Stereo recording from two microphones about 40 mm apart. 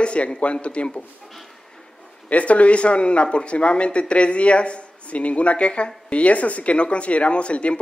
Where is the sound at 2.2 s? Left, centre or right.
Left.